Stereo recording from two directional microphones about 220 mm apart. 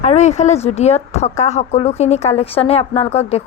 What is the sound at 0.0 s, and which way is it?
A woman's voice, 30° left (ahead or behind).